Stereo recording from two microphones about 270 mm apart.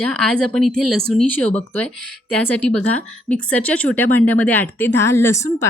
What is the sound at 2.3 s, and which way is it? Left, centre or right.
Speech, centre.